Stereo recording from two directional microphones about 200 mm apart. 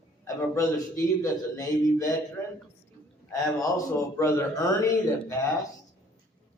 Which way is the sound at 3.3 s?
15° left (ahead or behind).